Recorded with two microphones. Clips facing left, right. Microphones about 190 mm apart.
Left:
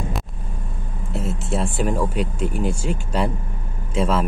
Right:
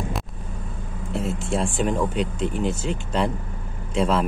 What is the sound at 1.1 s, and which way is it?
Speech, centre (ahead or behind).